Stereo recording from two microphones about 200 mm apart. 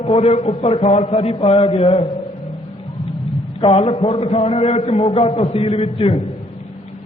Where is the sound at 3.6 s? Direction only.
30° left (ahead or behind).